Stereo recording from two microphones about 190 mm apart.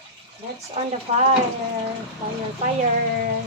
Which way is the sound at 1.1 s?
35° right (ahead or behind).